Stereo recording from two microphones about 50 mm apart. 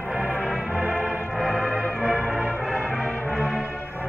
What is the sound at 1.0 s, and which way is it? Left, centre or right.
Music, centre.